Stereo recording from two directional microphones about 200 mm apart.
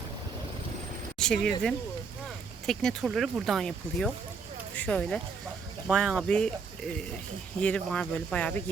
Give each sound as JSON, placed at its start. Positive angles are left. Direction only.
{"t": 1.2, "sound": "speech", "side_deg": 5}